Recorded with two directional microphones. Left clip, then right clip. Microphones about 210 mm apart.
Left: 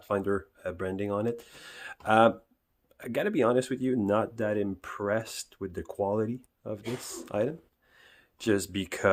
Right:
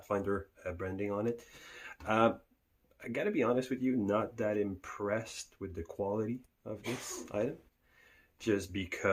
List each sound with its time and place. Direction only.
0.1 s speech: 35° left (ahead or behind)